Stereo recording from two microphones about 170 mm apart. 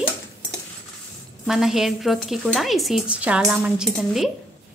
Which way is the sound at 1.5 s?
5° right (ahead or behind).